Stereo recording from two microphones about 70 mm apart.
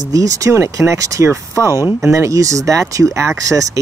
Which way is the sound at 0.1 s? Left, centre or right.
Right.